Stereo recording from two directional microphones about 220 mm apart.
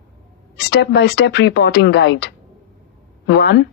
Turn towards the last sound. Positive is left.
turn(degrees=50)  # may be behind; listen again after turning